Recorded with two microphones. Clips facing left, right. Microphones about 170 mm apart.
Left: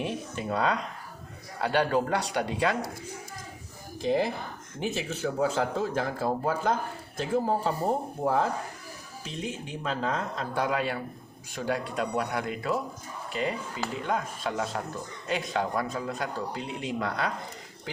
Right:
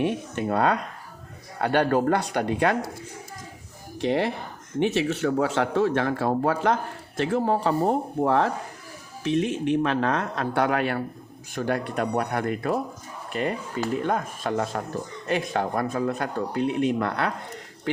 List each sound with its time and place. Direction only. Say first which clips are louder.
0.0 s speech: right 7 dB; 60° right (ahead or behind)
3.9 s a man's voice: right 2 dB; 70° right (ahead or behind)